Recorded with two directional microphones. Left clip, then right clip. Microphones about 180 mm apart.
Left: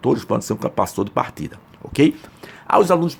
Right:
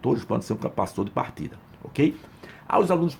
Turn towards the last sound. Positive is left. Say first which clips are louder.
# left 6 dB
turn(degrees=20)  # may be behind; listen again after turning